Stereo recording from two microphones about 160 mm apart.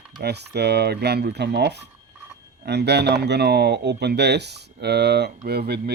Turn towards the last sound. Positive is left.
turn(degrees=-85)